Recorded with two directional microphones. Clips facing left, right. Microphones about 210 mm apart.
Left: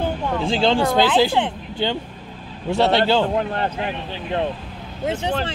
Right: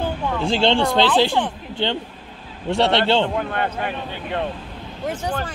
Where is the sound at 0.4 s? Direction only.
Centre (ahead or behind).